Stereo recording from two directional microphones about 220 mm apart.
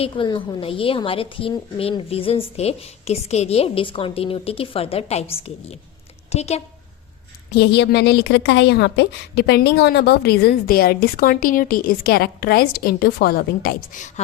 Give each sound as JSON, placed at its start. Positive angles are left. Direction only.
{"t": 0.0, "sound": "a woman's voice", "side_deg": 25}
{"t": 7.5, "sound": "a woman's voice", "side_deg": 50}